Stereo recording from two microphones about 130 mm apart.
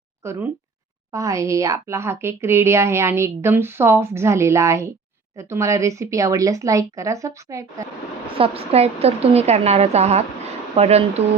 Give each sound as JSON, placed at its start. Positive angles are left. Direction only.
{"t": 0.2, "sound": "a woman's voice", "side_deg": -20}
{"t": 8.4, "sound": "a woman's voice", "side_deg": -50}